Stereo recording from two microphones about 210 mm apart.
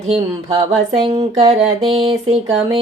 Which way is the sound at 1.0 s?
25° right (ahead or behind).